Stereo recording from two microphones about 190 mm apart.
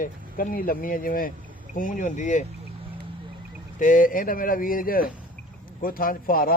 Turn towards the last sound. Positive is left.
turn(degrees=50)  # may be behind; listen again after turning